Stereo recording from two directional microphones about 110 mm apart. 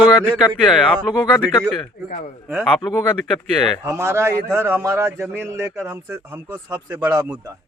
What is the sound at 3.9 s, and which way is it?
A man's voice, 25° right (ahead or behind).